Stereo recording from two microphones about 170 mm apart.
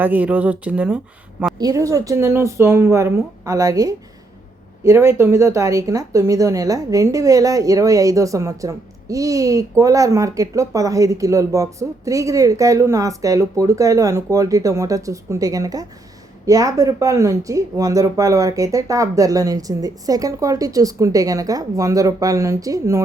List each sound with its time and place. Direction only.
0.0 s a woman's voice: 10° right (ahead or behind)
1.5 s speech: 20° right (ahead or behind)